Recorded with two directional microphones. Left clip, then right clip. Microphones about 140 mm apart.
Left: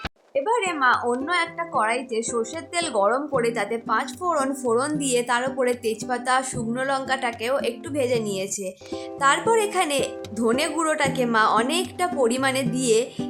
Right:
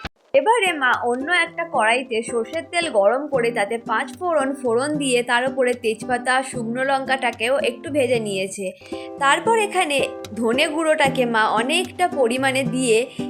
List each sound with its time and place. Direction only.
0.3 s a woman's voice: 15° right (ahead or behind)